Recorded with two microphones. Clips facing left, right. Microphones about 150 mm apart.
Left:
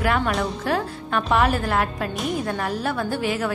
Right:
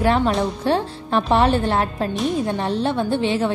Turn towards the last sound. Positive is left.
turn(degrees=-25)  # may be behind; listen again after turning